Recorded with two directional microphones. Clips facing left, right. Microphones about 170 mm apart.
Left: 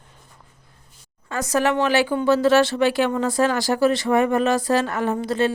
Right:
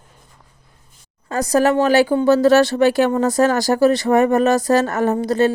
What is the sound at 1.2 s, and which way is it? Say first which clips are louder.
Speech: right 5 dB; 35° right (ahead or behind).